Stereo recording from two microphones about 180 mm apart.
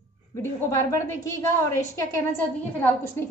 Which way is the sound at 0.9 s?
15° left (ahead or behind).